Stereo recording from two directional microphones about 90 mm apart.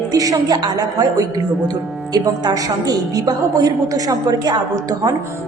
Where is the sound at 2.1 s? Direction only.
50° right (ahead or behind).